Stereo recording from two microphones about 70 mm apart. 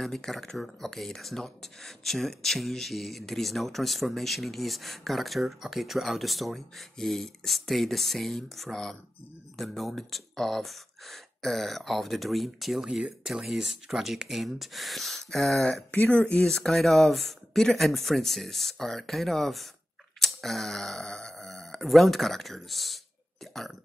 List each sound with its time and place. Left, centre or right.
0.0 s speech: centre
15.9 s speech: left
16.2 s speech: centre